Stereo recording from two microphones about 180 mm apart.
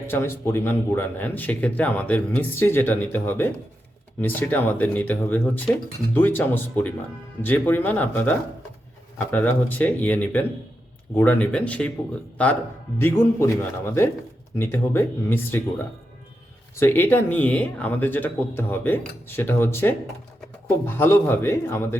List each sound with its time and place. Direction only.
0.1 s speech: 15° left (ahead or behind)